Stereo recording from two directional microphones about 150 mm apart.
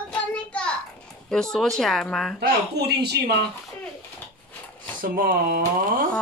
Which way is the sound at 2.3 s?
90° right.